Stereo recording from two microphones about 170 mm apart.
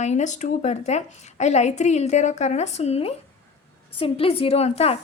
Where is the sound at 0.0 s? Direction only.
45° left (ahead or behind).